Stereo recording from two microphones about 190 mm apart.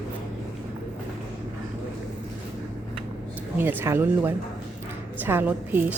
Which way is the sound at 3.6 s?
10° right (ahead or behind).